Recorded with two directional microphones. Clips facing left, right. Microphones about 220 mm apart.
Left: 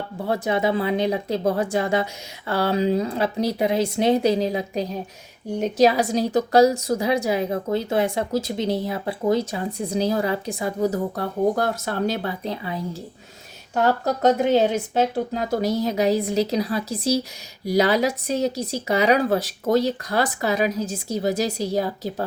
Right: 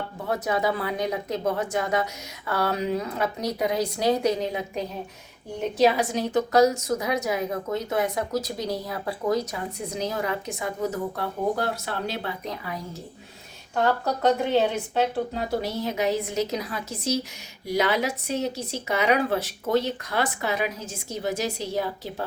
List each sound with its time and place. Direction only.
0.3 s a woman's voice: 25° left (ahead or behind); by 12.3 s 45° left (ahead or behind)
12.5 s speech: 30° left (ahead or behind)
13.8 s a woman's voice: 40° left (ahead or behind)